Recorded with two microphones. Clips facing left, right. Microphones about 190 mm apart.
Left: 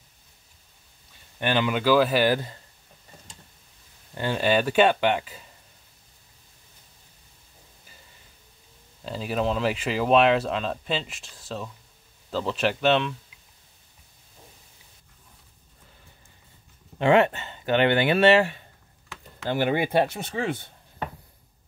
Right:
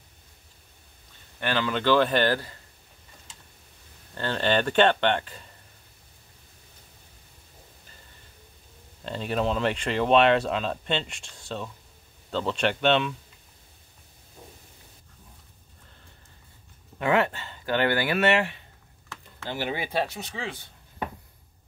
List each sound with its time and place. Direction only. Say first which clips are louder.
1.4 s speech: left 2 dB; 15° left (ahead or behind)
4.1 s speech: left 2 dB; 10° left (ahead or behind)
9.0 s speech: left 1 dB; 5° left (ahead or behind)
17.0 s speech: left 5 dB; 25° left (ahead or behind)
19.5 s speech: left 6 dB; 55° left (ahead or behind)